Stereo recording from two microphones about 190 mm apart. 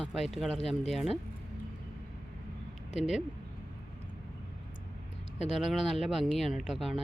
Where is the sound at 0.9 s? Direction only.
Centre (ahead or behind).